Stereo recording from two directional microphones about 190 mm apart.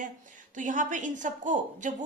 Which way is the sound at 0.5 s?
40° right (ahead or behind).